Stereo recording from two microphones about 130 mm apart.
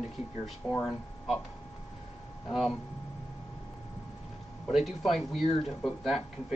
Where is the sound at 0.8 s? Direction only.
Centre (ahead or behind).